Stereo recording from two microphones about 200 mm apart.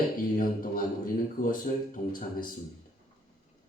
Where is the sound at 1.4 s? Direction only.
45° left (ahead or behind).